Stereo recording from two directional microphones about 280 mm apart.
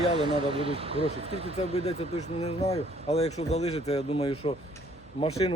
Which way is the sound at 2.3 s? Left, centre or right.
Left.